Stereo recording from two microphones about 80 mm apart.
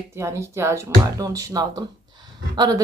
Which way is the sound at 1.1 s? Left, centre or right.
Right.